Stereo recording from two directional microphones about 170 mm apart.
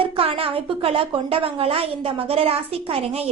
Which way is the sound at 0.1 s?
35° right (ahead or behind).